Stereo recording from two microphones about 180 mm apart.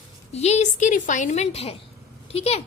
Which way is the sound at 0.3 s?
35° left (ahead or behind).